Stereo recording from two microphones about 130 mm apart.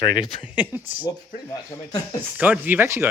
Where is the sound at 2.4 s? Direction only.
15° right (ahead or behind).